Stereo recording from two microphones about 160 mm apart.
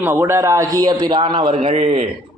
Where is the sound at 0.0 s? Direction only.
15° right (ahead or behind); by 2.0 s 45° right (ahead or behind).